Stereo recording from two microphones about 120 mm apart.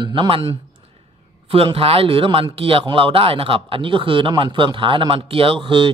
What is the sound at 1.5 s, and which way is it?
A man's voice, 50° right (ahead or behind).